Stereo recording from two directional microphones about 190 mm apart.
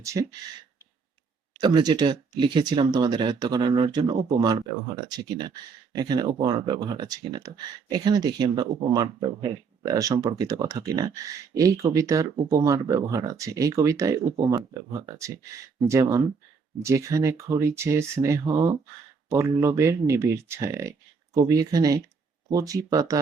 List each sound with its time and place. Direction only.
0.0 s speech: 15° right (ahead or behind)
1.6 s speech: 25° right (ahead or behind)
15.9 s speech: 15° right (ahead or behind)